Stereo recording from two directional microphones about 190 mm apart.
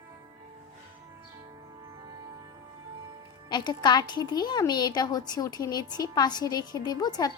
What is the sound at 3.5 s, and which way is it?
A woman's voice, 20° left (ahead or behind).